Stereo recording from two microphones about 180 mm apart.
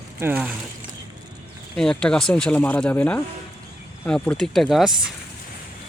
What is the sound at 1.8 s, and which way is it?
Speech, 5° left (ahead or behind).